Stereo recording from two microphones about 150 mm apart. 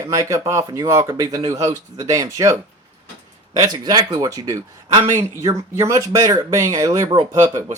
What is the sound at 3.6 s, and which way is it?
Speech, 25° right (ahead or behind).